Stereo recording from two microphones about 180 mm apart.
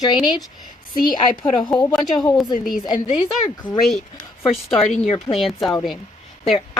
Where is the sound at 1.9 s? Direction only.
Centre (ahead or behind).